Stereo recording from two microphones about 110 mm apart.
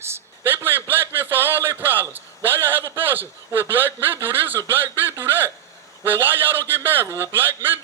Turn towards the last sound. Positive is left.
turn(degrees=-20)  # may be behind; listen again after turning